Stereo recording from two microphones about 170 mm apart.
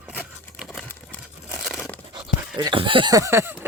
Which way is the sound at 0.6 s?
Centre (ahead or behind).